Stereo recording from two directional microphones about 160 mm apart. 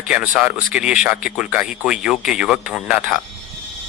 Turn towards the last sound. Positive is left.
turn(degrees=-5)  # may be behind; listen again after turning